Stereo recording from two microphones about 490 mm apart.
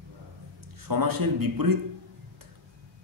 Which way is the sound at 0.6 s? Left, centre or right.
Right.